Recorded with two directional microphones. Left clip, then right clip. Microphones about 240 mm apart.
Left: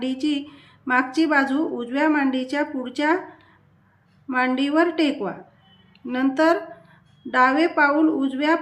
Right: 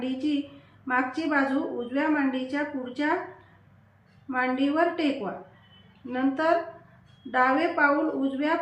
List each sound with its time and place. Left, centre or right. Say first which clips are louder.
0.0 s a woman's voice: left 4 dB; left
4.3 s a woman's voice: left 4 dB; left